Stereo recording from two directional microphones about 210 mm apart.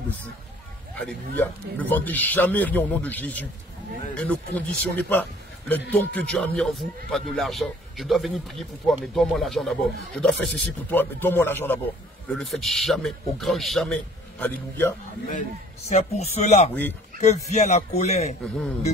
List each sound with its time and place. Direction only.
0.9 s speech: 5° left (ahead or behind)
15.9 s a man's voice: 30° left (ahead or behind)